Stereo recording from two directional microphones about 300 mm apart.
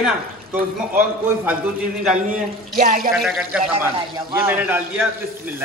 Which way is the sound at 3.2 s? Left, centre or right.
Centre.